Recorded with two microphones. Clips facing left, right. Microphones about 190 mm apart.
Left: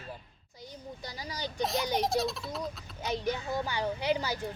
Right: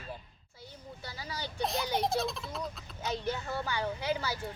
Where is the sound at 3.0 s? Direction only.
15° left (ahead or behind).